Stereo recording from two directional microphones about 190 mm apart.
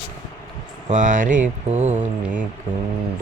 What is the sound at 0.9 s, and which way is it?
Speech, 40° right (ahead or behind).